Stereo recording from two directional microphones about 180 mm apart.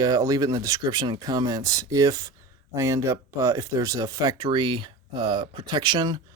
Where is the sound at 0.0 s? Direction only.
20° right (ahead or behind).